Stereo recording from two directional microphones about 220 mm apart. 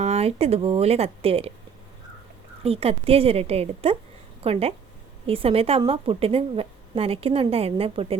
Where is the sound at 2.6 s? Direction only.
25° right (ahead or behind).